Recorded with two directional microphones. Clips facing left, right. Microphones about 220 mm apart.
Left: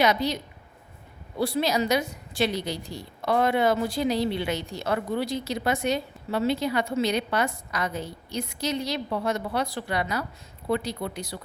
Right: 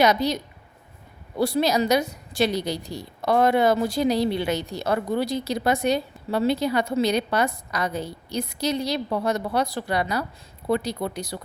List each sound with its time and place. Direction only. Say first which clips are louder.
0.0 s a woman's voice: right 3 dB; 40° right (ahead or behind)
1.4 s a woman's voice: right 3 dB; 40° right (ahead or behind)